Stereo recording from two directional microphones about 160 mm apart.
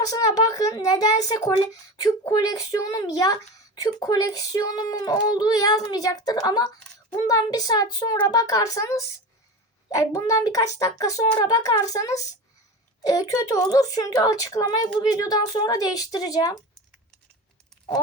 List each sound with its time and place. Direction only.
0.0 s a child's voice: 20° left (ahead or behind)